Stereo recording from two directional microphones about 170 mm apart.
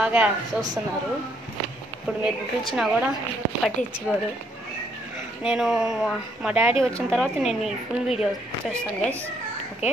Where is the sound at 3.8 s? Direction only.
50° left (ahead or behind).